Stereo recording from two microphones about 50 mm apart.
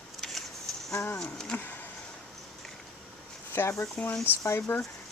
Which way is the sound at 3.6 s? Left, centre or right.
Left.